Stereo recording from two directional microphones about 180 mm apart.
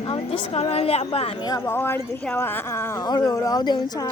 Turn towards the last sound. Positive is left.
turn(degrees=20)  # may be behind; listen again after turning